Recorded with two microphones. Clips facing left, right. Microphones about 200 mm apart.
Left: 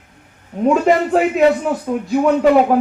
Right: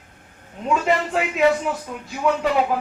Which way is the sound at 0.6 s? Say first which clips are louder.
Left 7 dB; 45° left (ahead or behind).